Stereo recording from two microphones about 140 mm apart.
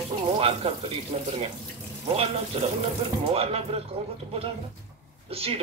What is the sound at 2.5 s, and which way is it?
Speech, 45° right (ahead or behind).